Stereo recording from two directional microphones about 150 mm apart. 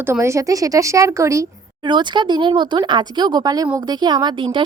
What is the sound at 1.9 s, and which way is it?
A woman's voice, 30° right (ahead or behind).